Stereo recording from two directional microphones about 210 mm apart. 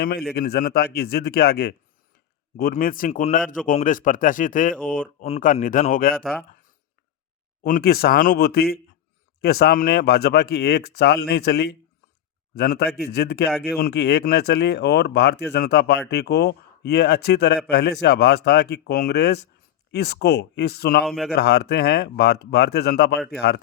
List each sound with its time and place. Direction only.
0.3 s speech: 50° left (ahead or behind)
6.5 s a sound: 40° left (ahead or behind)
7.6 s speech: 45° left (ahead or behind)
21.0 s speech: centre (ahead or behind)
21.3 s speech: 50° left (ahead or behind)